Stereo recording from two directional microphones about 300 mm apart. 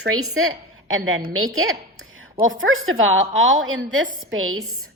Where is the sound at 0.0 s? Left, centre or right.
Right.